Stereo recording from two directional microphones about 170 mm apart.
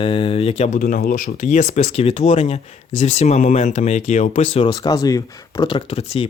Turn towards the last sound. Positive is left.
turn(degrees=35)  # may be behind; listen again after turning